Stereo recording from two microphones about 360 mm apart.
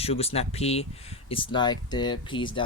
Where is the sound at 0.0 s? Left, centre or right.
Centre.